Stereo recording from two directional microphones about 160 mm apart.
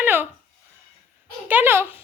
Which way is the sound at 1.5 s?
10° right (ahead or behind).